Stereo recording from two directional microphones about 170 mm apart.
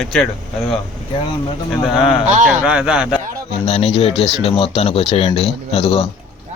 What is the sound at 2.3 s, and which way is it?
Speech, 45° right (ahead or behind).